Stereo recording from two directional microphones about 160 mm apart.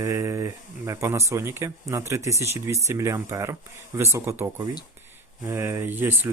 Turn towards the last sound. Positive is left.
turn(degrees=-15)  # may be behind; listen again after turning